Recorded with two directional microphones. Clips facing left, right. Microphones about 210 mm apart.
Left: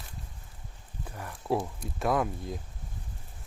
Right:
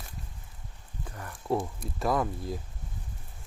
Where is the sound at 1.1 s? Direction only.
10° left (ahead or behind).